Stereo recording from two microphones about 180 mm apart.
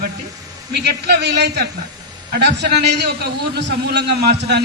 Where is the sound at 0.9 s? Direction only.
65° right (ahead or behind).